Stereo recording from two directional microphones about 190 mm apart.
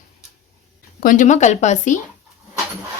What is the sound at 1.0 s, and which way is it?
Speech, 45° left (ahead or behind).